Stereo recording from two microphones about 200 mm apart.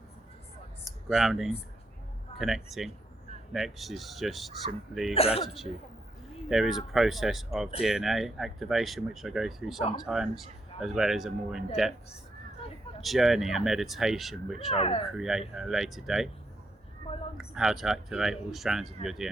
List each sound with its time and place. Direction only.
0.9 s speech: centre (ahead or behind)
5.1 s speech: 30° left (ahead or behind)
6.5 s speech: centre (ahead or behind)
13.0 s speech: centre (ahead or behind)
14.8 s speech: 30° left (ahead or behind)
15.0 s speech: centre (ahead or behind)
17.3 s speech: centre (ahead or behind)